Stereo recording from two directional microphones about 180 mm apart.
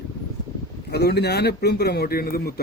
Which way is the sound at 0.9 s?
65° left (ahead or behind).